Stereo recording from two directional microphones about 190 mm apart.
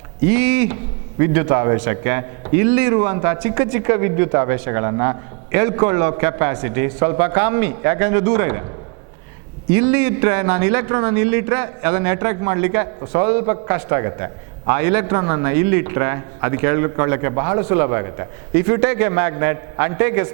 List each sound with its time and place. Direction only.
0.3 s a man's voice: 10° right (ahead or behind)
9.7 s a man's voice: 10° right (ahead or behind)